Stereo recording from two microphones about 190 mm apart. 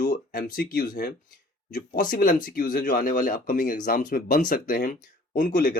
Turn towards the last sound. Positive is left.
turn(degrees=45)  # may be behind; listen again after turning